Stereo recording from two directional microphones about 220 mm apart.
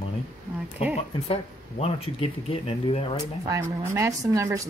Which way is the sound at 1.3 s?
25° left (ahead or behind).